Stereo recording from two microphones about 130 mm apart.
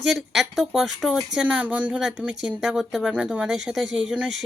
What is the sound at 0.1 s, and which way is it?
Speech, centre (ahead or behind).